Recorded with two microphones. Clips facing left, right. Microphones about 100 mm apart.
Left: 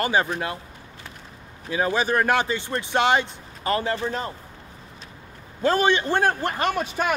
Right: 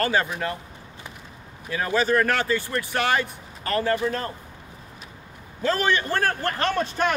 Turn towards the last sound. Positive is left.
turn(degrees=10)  # may be behind; listen again after turning